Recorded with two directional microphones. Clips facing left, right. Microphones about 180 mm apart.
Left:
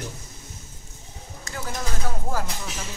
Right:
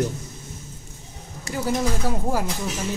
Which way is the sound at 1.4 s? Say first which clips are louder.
Right 8 dB; 15° right (ahead or behind).